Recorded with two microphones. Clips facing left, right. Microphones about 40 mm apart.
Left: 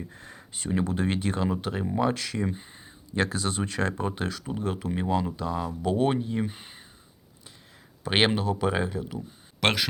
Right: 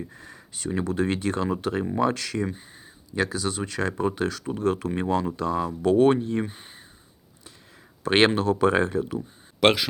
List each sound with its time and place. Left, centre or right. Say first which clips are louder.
0.1 s a sound: even; left
0.9 s speech: right 3 dB; centre
3.2 s speech: right 1 dB; left
4.0 s speech: right 5 dB; centre
8.0 s speech: right 4 dB; centre
9.0 s speech: right 5 dB; centre